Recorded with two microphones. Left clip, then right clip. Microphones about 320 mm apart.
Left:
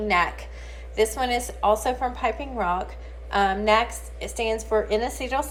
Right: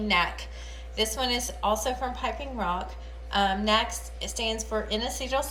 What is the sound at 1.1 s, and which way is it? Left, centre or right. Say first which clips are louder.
A woman's voice: left 3 dB; centre.